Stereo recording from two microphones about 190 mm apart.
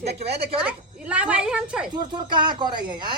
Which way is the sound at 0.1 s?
60° right (ahead or behind).